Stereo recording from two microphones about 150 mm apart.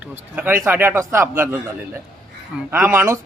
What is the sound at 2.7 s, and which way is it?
Speech, 15° right (ahead or behind).